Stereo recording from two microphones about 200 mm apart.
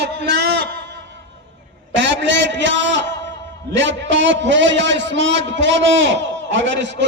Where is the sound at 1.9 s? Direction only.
60° right (ahead or behind).